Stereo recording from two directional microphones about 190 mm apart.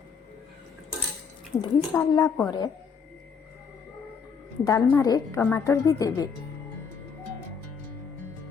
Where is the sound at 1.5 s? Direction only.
15° left (ahead or behind).